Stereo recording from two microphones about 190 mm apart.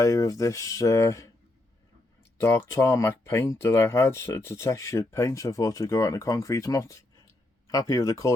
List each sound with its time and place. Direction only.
0.0 s speech: 15° left (ahead or behind)
2.4 s speech: 15° left (ahead or behind)